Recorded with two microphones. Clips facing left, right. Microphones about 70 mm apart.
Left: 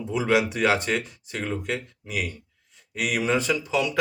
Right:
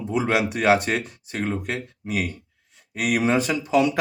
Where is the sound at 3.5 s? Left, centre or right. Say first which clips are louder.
Right 5 dB; right.